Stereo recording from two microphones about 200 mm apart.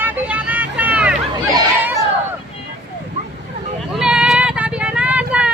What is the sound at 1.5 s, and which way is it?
Chatter, 20° right (ahead or behind).